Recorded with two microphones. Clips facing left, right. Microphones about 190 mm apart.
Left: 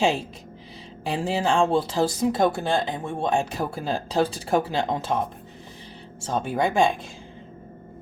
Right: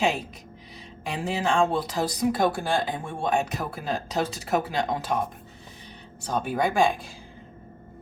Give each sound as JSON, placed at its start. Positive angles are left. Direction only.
{"t": 1.0, "sound": "speech", "side_deg": 30}
{"t": 6.1, "sound": "speech", "side_deg": 25}